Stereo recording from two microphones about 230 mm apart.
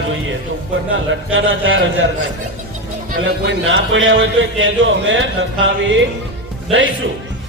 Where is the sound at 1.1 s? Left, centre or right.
Right.